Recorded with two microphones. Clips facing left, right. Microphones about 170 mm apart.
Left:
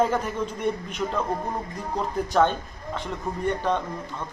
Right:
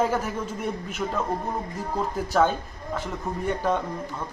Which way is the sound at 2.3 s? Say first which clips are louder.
Even; 5° right (ahead or behind).